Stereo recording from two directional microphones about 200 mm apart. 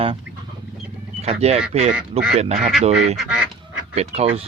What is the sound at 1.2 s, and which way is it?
Speech, 30° right (ahead or behind).